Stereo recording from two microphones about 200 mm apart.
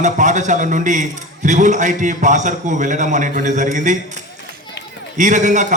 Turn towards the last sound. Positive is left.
turn(degrees=-40)  # may be behind; listen again after turning